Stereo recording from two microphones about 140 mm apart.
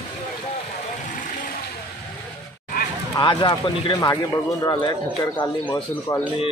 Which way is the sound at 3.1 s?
35° left (ahead or behind).